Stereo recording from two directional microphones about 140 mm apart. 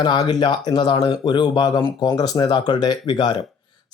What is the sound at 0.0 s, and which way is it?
Speech, 30° left (ahead or behind).